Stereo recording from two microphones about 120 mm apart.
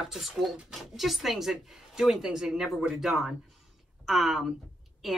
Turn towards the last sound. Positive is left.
turn(degrees=0)  # may be behind; listen again after turning